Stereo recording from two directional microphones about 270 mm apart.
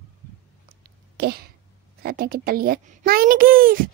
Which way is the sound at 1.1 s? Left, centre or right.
Right.